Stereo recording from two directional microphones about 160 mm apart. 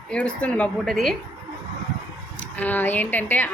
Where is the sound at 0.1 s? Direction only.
5° left (ahead or behind).